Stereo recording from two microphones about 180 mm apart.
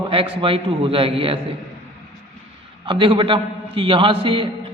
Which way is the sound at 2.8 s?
30° right (ahead or behind).